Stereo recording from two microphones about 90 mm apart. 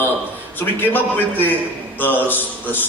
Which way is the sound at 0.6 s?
20° left (ahead or behind).